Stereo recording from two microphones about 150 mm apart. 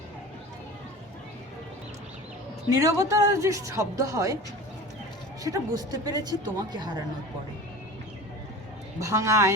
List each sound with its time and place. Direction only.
2.6 s speech: 20° right (ahead or behind)
5.4 s speech: 25° right (ahead or behind)
9.0 s speech: 20° right (ahead or behind)